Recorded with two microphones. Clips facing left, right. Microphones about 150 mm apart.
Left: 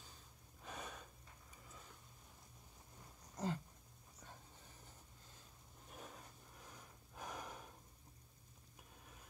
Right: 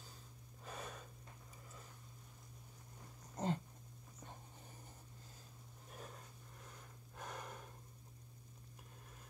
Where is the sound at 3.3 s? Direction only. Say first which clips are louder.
Right 3 dB; 30° right (ahead or behind).